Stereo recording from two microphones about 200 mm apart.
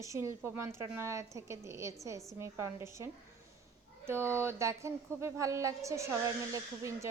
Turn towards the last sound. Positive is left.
turn(degrees=-15)  # may be behind; listen again after turning